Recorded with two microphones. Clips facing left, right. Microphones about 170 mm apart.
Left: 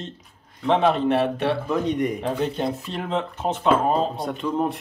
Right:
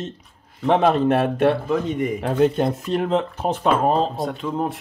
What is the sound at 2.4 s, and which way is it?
Speech, 45° right (ahead or behind).